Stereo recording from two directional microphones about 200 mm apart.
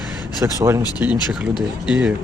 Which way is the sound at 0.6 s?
15° right (ahead or behind).